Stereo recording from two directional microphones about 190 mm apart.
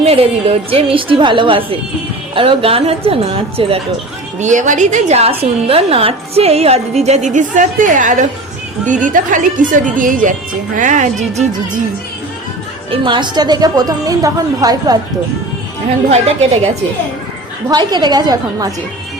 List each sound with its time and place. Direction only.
0.0 s a woman's voice: 30° right (ahead or behind)
4.4 s a woman's voice: 40° right (ahead or behind)
12.9 s a woman's voice: 25° right (ahead or behind)
17.7 s a woman's voice: 20° right (ahead or behind)